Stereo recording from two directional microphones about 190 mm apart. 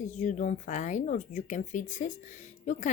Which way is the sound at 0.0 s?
40° left (ahead or behind).